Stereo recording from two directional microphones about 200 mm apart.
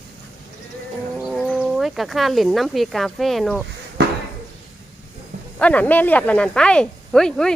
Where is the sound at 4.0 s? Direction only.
55° right (ahead or behind).